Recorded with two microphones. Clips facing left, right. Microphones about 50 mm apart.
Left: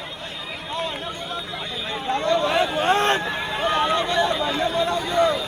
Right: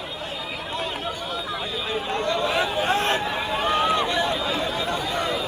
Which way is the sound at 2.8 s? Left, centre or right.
Left.